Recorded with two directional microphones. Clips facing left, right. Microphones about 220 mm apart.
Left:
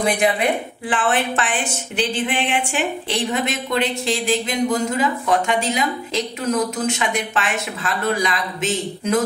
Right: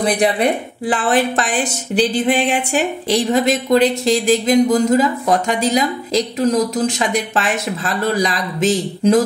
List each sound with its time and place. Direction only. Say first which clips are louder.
0.0 s speech: right 3 dB; 35° right (ahead or behind)